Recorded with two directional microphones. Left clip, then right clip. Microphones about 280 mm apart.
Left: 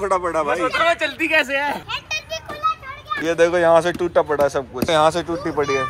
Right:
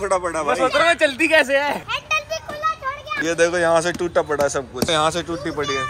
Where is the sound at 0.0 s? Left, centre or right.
Centre.